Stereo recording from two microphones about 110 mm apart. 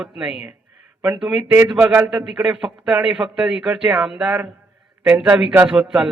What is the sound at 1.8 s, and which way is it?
Speech, 20° right (ahead or behind).